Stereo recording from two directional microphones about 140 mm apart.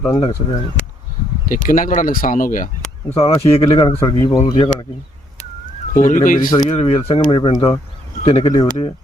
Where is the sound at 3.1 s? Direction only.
45° left (ahead or behind).